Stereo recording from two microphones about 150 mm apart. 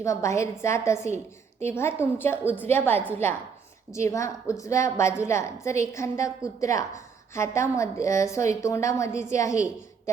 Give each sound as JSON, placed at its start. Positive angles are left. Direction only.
{"t": 0.0, "sound": "a woman's voice", "side_deg": 20}